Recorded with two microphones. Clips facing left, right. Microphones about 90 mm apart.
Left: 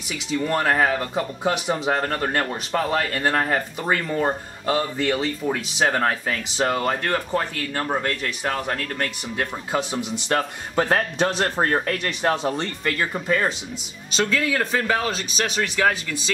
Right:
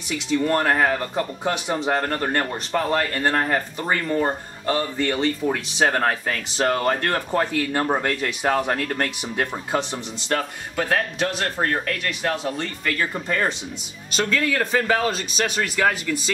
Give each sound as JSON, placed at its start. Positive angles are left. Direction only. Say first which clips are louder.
{"t": 0.3, "sound": "speech", "louder": "right 1 dB", "side_deg": 0}
{"t": 4.6, "sound": "speech", "louder": "even", "side_deg": 15}
{"t": 5.1, "sound": "speech", "louder": "right 2 dB", "side_deg": 0}
{"t": 7.3, "sound": "speech", "louder": "right 3 dB", "side_deg": -10}
{"t": 9.7, "sound": "speech", "louder": "even", "side_deg": 5}
{"t": 10.3, "sound": "speech", "louder": "left 2 dB", "side_deg": 30}
{"t": 13.1, "sound": "speech", "louder": "left 1 dB", "side_deg": 5}